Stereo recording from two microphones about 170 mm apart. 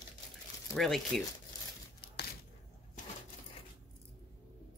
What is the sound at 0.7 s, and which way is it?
Speech, centre (ahead or behind).